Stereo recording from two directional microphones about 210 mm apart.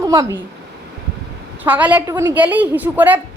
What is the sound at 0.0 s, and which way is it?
Speech, 15° right (ahead or behind).